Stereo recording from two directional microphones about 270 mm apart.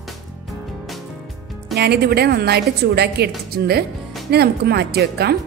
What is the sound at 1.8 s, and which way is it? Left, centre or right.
A woman's voice, right.